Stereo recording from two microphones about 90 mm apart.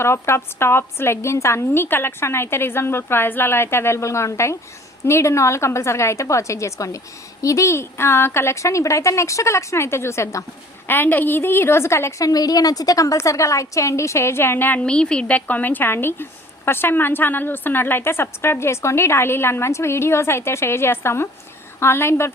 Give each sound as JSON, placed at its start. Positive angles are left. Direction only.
{"t": 0.0, "sound": "a woman's voice", "side_deg": 30}
{"t": 12.3, "sound": "a woman's voice", "side_deg": 45}